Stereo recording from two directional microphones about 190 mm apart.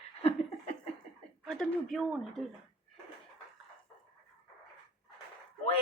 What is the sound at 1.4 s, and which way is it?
A woman's voice, centre (ahead or behind).